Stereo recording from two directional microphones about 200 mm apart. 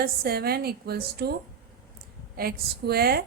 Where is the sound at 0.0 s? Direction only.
50° right (ahead or behind).